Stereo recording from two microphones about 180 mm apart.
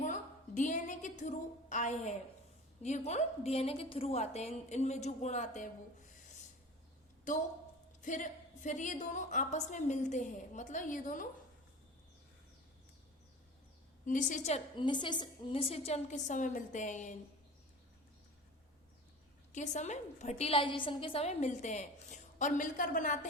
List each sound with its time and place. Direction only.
0.0 s a sound: 45° left (ahead or behind)
2.8 s a woman's voice: 35° left (ahead or behind)
7.3 s a woman's voice: 45° left (ahead or behind)
14.0 s a woman's voice: 45° left (ahead or behind)
14.8 s a woman's voice: 25° left (ahead or behind); by 17.2 s 45° left (ahead or behind)
19.5 s a woman's voice: 40° left (ahead or behind)